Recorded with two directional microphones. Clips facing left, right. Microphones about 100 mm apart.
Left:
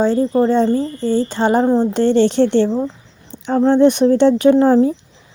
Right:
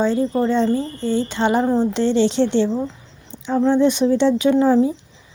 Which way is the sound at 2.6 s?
30° left (ahead or behind).